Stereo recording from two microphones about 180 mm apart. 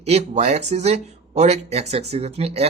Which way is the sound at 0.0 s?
40° right (ahead or behind).